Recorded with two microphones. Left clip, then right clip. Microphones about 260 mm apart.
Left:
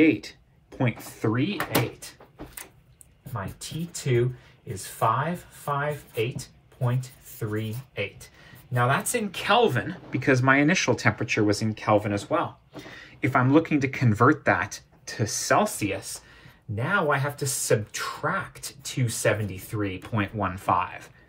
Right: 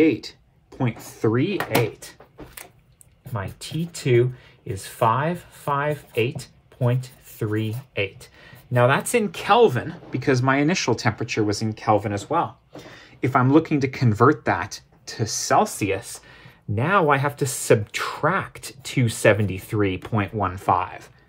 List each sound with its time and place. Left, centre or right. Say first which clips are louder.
0.2 s speech: right 3 dB; centre
1.5 s speech: right 4 dB; right
3.6 s speech: right 6 dB; right
7.3 s speech: right 5 dB; right
16.7 s speech: right 5 dB; right
17.5 s speech: right 5 dB; right
19.2 s speech: right 7 dB; right